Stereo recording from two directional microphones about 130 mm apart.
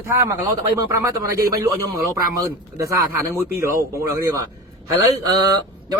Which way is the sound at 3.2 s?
20° right (ahead or behind).